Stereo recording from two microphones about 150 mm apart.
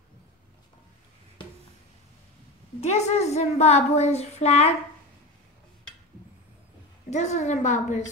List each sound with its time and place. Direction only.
1.4 s a sound: 30° left (ahead or behind)
2.8 s a woman's voice: 45° left (ahead or behind)
7.1 s a woman's voice: 50° left (ahead or behind)